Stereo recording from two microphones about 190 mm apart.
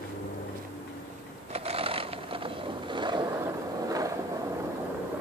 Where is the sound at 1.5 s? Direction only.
30° right (ahead or behind).